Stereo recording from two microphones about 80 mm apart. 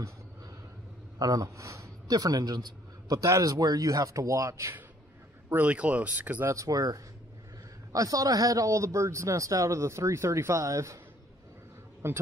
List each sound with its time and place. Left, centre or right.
1.2 s a man's voice: right
5.5 s speech: centre
6.5 s a man's voice: right
12.0 s speech: right